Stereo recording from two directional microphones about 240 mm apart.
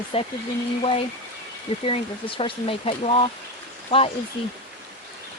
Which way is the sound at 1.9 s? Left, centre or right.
Left.